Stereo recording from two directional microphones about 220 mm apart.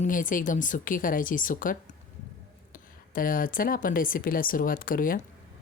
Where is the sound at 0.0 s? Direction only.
40° left (ahead or behind).